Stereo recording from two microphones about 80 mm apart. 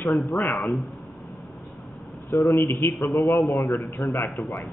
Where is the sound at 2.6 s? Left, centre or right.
Left.